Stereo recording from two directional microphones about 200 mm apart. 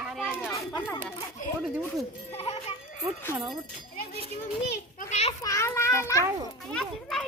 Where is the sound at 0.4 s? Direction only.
15° left (ahead or behind).